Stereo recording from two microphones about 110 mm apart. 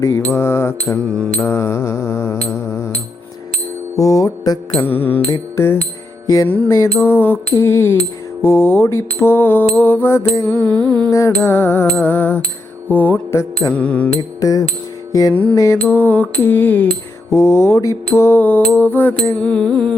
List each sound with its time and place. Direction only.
0.0 s mantra: 25° left (ahead or behind)
0.9 s mantra: 10° left (ahead or behind)
1.4 s mantra: 20° left (ahead or behind)
3.9 s mantra: 30° left (ahead or behind)
4.7 s mantra: 15° left (ahead or behind)
6.2 s music: 35° left (ahead or behind)
6.5 s mantra: 15° left (ahead or behind)
10.7 s mantra: 40° right (ahead or behind)
11.1 s mantra: 25° left (ahead or behind)
13.7 s mantra: 10° left (ahead or behind)
15.3 s mantra: 15° left (ahead or behind)
15.5 s mantra: 30° left (ahead or behind)
15.8 s mantra: 15° left (ahead or behind)